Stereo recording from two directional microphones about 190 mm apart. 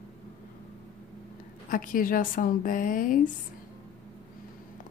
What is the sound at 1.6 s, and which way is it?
A woman's voice, 45° left (ahead or behind).